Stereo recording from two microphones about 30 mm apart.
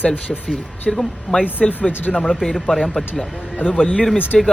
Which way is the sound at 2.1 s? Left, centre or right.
Left.